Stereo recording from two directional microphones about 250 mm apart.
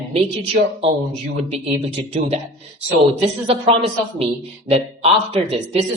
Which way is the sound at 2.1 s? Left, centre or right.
Right.